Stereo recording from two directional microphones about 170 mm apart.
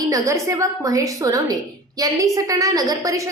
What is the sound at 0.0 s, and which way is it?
A woman's voice, 20° right (ahead or behind).